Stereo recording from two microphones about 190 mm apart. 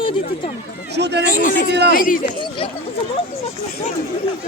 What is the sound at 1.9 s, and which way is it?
Speech, 50° left (ahead or behind).